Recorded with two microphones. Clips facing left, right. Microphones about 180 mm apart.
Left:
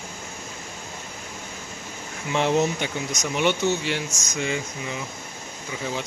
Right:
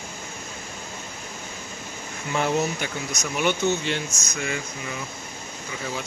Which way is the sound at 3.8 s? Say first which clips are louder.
Even; 10° left (ahead or behind).